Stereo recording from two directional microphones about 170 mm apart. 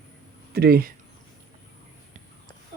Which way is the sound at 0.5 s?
65° right (ahead or behind).